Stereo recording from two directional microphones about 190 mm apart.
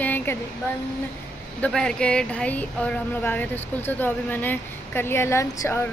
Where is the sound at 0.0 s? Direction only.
10° left (ahead or behind).